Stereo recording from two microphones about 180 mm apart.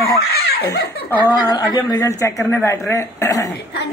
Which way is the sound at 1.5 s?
25° left (ahead or behind).